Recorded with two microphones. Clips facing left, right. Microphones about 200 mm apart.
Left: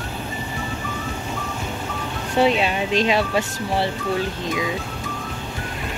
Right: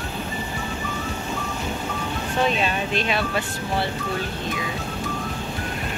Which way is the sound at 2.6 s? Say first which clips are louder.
Left 4 dB; 90° left.